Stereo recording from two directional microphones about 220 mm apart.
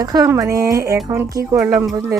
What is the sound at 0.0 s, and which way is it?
Speech, 15° right (ahead or behind).